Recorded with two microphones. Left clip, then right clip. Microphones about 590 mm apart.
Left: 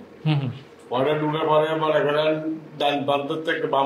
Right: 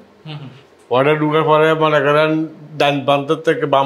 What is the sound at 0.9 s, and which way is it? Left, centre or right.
A man's voice, right.